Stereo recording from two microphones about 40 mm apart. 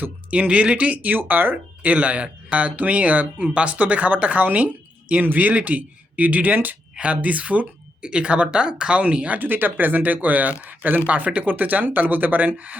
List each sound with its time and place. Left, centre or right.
0.3 s speech: right
1.0 s speech: right
1.8 s speech: right
5.2 s speech: right
7.0 s speech: right
8.0 s speech: right
9.4 s speech: right